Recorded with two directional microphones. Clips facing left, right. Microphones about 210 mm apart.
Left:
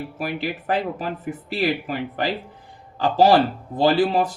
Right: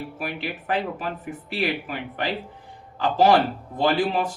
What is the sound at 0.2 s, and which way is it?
Speech, 40° left (ahead or behind).